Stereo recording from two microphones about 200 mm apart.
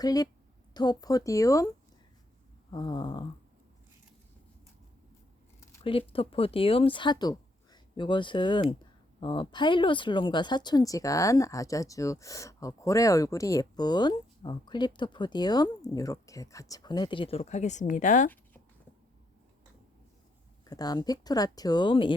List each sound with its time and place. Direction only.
0.0 s speech: 20° left (ahead or behind)
2.7 s speech: 25° left (ahead or behind)
5.8 s speech: 25° left (ahead or behind)
20.7 s speech: 20° left (ahead or behind)